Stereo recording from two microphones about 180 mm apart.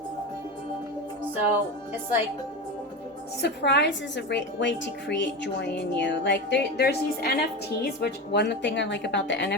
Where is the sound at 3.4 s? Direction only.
75° left (ahead or behind).